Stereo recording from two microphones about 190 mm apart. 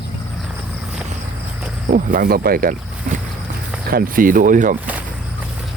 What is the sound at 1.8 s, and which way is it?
Speech, 45° right (ahead or behind).